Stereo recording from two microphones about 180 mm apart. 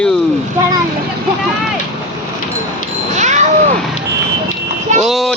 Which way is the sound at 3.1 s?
40° right (ahead or behind).